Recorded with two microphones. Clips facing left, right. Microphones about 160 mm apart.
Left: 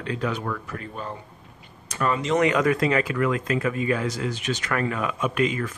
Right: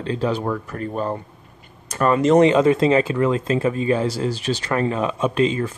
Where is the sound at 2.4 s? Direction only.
25° right (ahead or behind).